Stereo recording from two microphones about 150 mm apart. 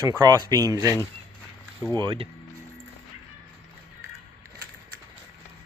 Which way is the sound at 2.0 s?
30° right (ahead or behind).